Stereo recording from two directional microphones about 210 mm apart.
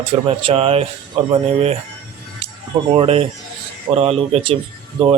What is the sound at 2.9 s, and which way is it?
A man's voice, 25° right (ahead or behind).